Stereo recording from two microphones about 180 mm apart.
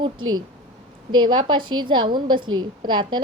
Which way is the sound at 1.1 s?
25° right (ahead or behind).